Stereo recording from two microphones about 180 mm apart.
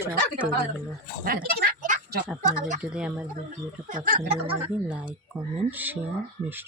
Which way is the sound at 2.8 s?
5° right (ahead or behind).